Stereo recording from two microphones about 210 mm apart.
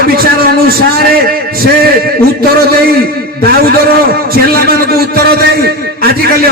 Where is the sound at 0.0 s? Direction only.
45° right (ahead or behind).